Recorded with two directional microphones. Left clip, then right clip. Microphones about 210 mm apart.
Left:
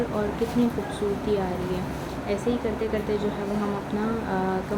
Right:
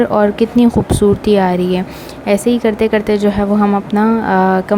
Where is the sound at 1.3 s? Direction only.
50° right (ahead or behind).